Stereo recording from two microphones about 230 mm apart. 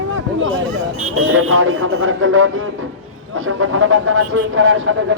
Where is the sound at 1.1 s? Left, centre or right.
Right.